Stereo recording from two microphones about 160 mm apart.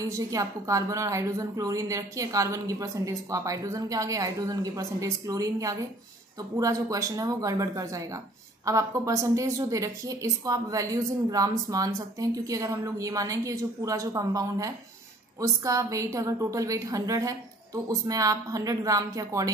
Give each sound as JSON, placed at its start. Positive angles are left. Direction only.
{"t": 0.0, "sound": "a woman's voice", "side_deg": -20}